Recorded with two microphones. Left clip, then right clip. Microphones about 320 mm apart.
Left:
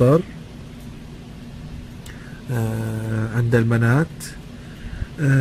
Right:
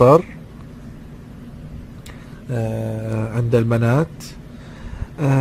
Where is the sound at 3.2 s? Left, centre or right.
Centre.